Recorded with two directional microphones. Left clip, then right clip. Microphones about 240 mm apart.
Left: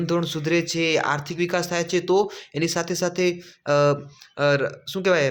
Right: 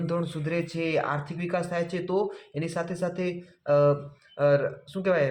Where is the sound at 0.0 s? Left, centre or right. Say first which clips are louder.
Left 6 dB; left.